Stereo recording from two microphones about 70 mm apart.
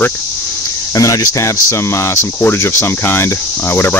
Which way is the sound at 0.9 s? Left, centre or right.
Left.